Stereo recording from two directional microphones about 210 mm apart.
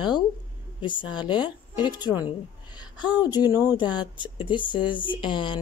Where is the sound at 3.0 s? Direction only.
20° left (ahead or behind).